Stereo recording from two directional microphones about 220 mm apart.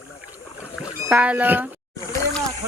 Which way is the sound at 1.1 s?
5° right (ahead or behind).